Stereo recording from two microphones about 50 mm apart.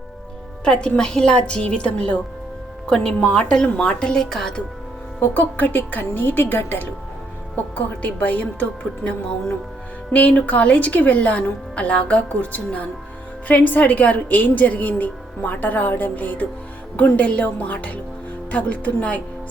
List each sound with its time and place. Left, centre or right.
0.6 s a woman's voice: centre
5.2 s a woman's voice: left
7.5 s a woman's voice: left